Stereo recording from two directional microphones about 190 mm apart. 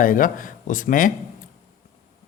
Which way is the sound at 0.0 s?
45° left (ahead or behind).